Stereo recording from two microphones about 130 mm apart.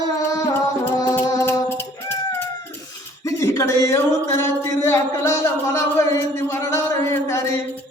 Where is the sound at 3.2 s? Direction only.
25° left (ahead or behind).